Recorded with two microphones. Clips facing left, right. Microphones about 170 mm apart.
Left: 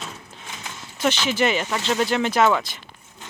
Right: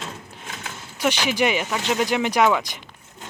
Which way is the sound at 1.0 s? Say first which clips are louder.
Even; 15° right (ahead or behind).